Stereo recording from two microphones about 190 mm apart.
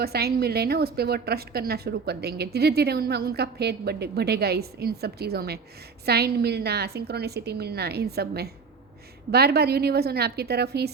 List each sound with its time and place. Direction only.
0.0 s a woman's voice: 55° right (ahead or behind)